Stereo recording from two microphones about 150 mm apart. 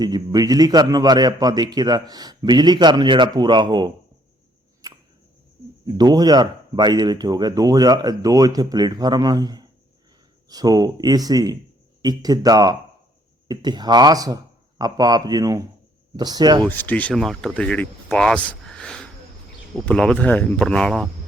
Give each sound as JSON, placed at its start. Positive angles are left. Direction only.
{"t": 0.0, "sound": "a man's voice", "side_deg": -25}
{"t": 4.8, "sound": "a sound", "side_deg": -25}
{"t": 5.8, "sound": "a man's voice", "side_deg": -25}
{"t": 16.6, "sound": "speech", "side_deg": 10}